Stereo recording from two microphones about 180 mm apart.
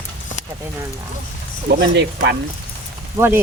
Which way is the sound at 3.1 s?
15° right (ahead or behind).